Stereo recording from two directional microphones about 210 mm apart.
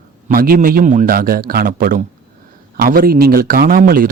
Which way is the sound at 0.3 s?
45° right (ahead or behind).